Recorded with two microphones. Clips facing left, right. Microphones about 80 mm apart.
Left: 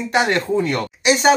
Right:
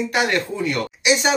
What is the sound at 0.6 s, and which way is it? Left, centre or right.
Speech, left.